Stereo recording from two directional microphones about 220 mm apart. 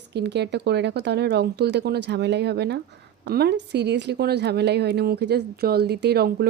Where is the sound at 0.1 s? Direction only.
50° right (ahead or behind).